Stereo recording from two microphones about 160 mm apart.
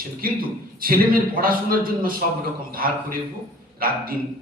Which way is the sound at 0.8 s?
65° right (ahead or behind).